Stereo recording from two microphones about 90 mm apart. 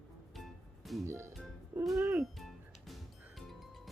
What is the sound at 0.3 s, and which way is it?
Music, centre (ahead or behind).